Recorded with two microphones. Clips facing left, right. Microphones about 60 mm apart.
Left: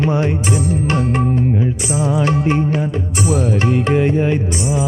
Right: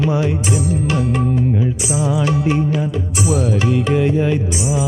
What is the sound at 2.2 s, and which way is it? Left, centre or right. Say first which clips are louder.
Music: left 2 dB; left.